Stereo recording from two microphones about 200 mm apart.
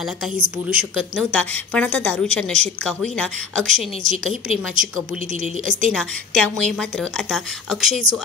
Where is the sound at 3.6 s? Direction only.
40° right (ahead or behind).